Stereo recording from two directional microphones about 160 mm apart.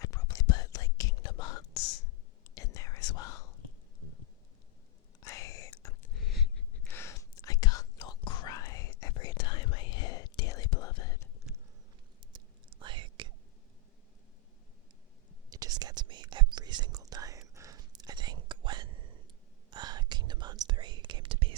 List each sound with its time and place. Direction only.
0.0 s whispering: 20° left (ahead or behind)
5.2 s whispering: 20° left (ahead or behind)
6.1 s a sound: centre (ahead or behind)
6.9 s whispering: 20° left (ahead or behind)
12.3 s whispering: 30° right (ahead or behind)
15.4 s whispering: 25° right (ahead or behind)